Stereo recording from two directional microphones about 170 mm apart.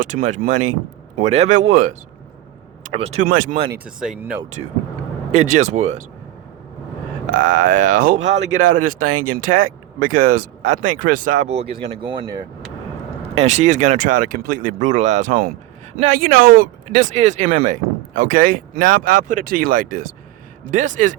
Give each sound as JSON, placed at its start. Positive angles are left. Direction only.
{"t": 0.0, "sound": "speech", "side_deg": -50}
{"t": 3.8, "sound": "speech", "side_deg": -5}
{"t": 5.3, "sound": "speech", "side_deg": -45}
{"t": 7.3, "sound": "speech", "side_deg": -50}
{"t": 8.5, "sound": "speech", "side_deg": -50}
{"t": 11.9, "sound": "speech", "side_deg": -30}
{"t": 13.3, "sound": "speech", "side_deg": -40}
{"t": 17.2, "sound": "speech", "side_deg": -45}